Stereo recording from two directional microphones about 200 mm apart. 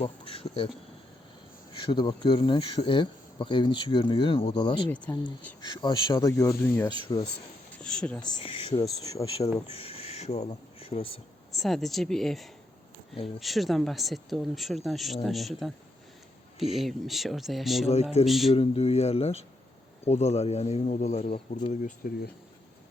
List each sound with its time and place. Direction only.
0.0 s speech: 30° left (ahead or behind)
1.7 s speech: 25° left (ahead or behind)
4.9 s speech: 10° left (ahead or behind)
5.6 s speech: 20° left (ahead or behind); by 8.3 s 5° left (ahead or behind)
8.4 s speech: 25° left (ahead or behind)
9.7 s speech: 30° left (ahead or behind)
11.5 s speech: centre (ahead or behind)
16.7 s speech: centre (ahead or behind)
18.5 s speech: 30° left (ahead or behind)